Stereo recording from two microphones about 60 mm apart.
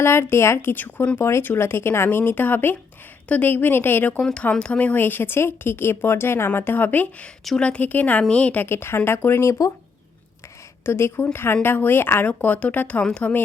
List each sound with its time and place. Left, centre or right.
0.0 s a woman's voice: left
0.7 s a woman's voice: left
4.2 s speech: centre
8.6 s a woman's voice: left
9.5 s speech: left
10.8 s a woman's voice: left
12.2 s speech: left